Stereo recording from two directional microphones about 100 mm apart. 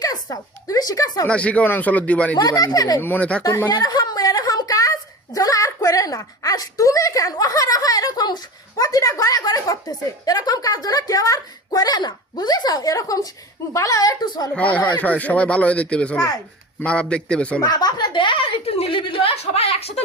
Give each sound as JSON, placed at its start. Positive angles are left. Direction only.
{"t": 0.0, "sound": "speech", "side_deg": 40}
{"t": 1.3, "sound": "speech", "side_deg": 15}
{"t": 2.3, "sound": "speech", "side_deg": 40}
{"t": 3.0, "sound": "speech", "side_deg": 15}
{"t": 3.7, "sound": "a woman's voice", "side_deg": 40}
{"t": 14.5, "sound": "speech", "side_deg": 15}
{"t": 17.6, "sound": "a woman's voice", "side_deg": 40}